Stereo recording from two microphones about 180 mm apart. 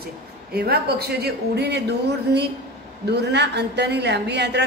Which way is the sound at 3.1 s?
70° right (ahead or behind).